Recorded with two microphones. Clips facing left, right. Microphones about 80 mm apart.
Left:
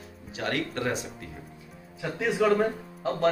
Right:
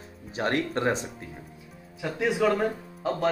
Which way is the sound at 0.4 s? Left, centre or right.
Right.